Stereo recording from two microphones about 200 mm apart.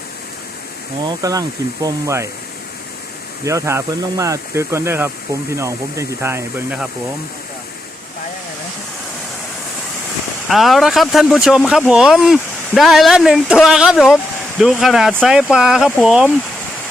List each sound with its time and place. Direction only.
1.0 s speech: 15° right (ahead or behind)
3.4 s speech: 15° right (ahead or behind)
10.5 s speech: centre (ahead or behind)